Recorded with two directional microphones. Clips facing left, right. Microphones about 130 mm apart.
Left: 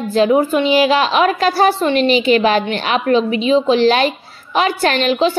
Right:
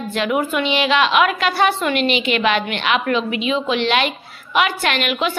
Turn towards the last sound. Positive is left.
turn(degrees=30)  # may be behind; listen again after turning